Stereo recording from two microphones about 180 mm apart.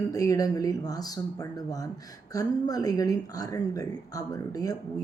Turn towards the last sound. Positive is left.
turn(degrees=20)  # may be behind; listen again after turning